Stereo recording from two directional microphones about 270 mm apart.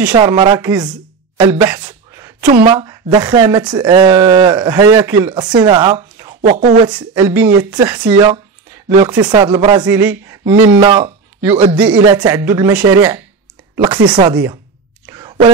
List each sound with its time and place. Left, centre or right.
0.1 s speech: centre
1.4 s a sound: centre
2.6 s speech: centre
6.4 s speech: right
6.9 s speech: centre
15.0 s whispering: centre